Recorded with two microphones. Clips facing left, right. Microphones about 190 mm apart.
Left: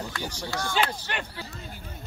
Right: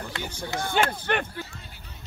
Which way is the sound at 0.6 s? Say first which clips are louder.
Right 2 dB; 55° right (ahead or behind).